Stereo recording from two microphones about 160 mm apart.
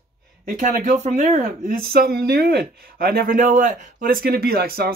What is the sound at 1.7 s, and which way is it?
Speech, 75° right (ahead or behind).